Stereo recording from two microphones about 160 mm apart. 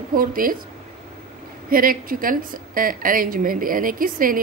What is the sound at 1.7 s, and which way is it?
A woman's voice, 65° right (ahead or behind).